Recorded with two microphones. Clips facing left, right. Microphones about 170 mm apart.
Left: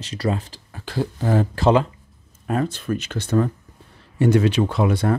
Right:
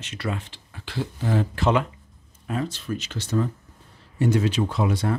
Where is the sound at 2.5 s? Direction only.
50° left (ahead or behind).